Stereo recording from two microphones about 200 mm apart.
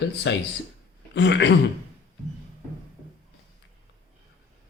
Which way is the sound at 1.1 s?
60° left (ahead or behind).